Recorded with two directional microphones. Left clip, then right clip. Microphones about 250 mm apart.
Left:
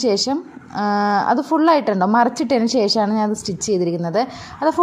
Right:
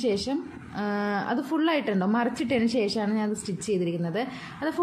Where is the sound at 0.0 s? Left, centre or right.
Left.